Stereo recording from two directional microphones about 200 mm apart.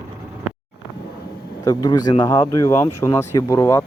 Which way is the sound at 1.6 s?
20° left (ahead or behind).